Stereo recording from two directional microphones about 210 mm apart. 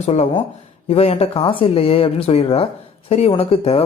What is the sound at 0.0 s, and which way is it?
Speech, 30° left (ahead or behind).